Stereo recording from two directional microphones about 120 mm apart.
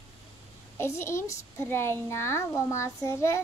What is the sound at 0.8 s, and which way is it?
A child's voice, 20° left (ahead or behind).